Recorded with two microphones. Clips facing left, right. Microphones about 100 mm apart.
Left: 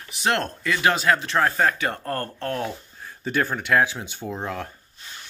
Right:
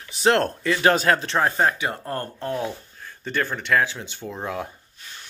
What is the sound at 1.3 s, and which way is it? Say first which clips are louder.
Speech: even; 25° right (ahead or behind).